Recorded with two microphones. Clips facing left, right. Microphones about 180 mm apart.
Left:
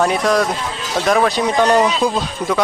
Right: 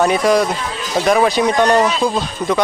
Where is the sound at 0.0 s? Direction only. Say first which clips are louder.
Right 2 dB; centre (ahead or behind).